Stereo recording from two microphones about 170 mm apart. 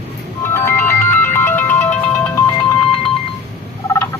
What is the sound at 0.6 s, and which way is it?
Music, 15° left (ahead or behind).